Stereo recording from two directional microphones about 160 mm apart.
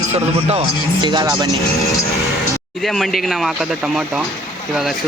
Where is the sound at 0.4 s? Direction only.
35° right (ahead or behind).